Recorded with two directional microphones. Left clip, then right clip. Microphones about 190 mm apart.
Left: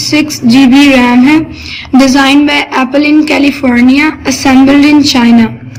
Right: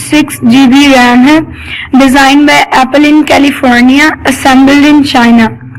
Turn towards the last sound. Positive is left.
turn(degrees=-25)  # may be behind; listen again after turning